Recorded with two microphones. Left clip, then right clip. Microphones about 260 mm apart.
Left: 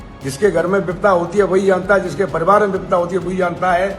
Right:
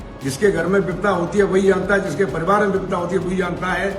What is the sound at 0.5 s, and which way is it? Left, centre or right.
A man's voice, centre.